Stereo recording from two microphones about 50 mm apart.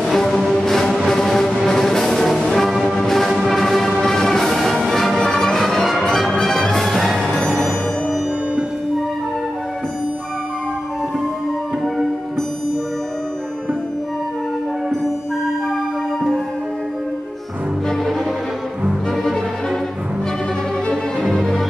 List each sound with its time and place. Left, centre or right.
0.0 s music: centre
7.2 s music: centre
7.5 s music: centre
21.3 s music: centre